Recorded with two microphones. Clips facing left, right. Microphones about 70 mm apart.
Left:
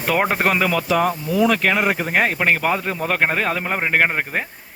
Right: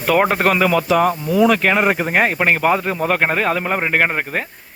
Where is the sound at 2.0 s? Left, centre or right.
Right; by 4.4 s centre.